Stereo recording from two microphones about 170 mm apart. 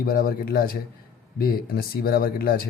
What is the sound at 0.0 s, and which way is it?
Speech, 60° left (ahead or behind).